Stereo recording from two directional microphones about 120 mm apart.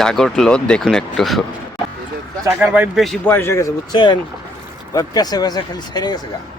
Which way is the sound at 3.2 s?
20° left (ahead or behind).